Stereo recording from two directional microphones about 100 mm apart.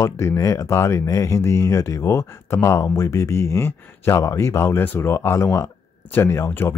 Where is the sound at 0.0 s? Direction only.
30° left (ahead or behind).